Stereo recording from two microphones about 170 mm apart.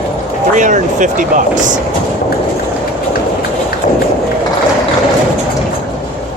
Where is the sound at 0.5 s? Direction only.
50° right (ahead or behind).